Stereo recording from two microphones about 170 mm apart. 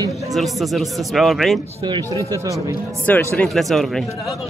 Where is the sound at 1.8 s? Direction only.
25° right (ahead or behind).